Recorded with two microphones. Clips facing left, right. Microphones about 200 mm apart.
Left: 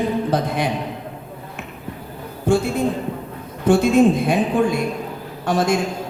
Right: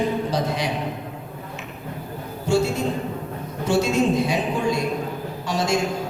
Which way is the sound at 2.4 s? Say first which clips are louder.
Left 2 dB; 55° left (ahead or behind).